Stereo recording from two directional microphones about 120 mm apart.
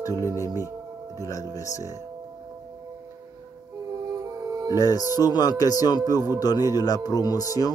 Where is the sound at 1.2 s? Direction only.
30° left (ahead or behind).